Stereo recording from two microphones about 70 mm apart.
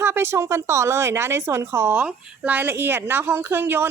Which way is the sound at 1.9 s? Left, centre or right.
Right.